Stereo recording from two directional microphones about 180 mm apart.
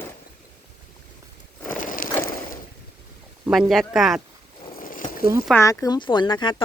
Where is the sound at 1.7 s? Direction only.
50° left (ahead or behind).